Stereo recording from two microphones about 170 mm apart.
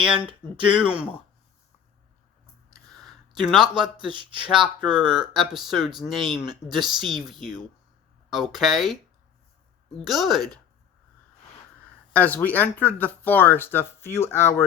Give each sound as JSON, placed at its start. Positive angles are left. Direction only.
{"t": 0.0, "sound": "speech", "side_deg": -5}
{"t": 2.7, "sound": "a sound", "side_deg": 0}
{"t": 3.9, "sound": "speech", "side_deg": -30}
{"t": 4.4, "sound": "speech", "side_deg": -5}
{"t": 10.1, "sound": "speech", "side_deg": 0}
{"t": 12.1, "sound": "speech", "side_deg": 10}